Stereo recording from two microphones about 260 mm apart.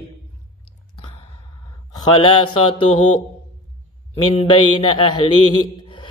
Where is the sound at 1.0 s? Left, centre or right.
Left.